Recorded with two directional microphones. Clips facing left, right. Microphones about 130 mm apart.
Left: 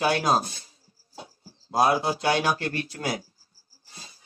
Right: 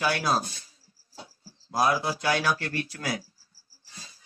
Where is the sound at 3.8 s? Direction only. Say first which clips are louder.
Left 1 dB; 30° left (ahead or behind).